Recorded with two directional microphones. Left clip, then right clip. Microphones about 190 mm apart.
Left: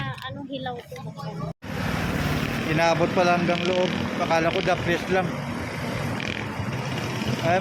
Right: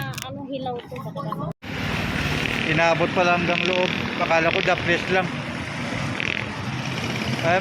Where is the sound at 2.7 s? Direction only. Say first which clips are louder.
Right 1 dB; centre (ahead or behind).